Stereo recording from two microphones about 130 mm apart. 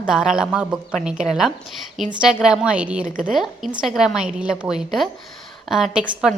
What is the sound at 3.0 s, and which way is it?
Speech, 90° right.